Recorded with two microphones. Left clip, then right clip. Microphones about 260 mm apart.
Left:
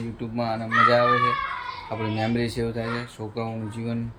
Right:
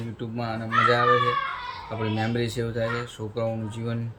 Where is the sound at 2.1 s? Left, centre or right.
Centre.